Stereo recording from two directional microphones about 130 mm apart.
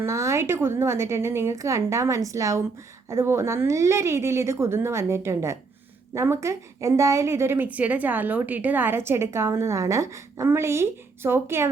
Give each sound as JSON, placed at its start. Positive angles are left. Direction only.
{"t": 0.0, "sound": "a woman's voice", "side_deg": -20}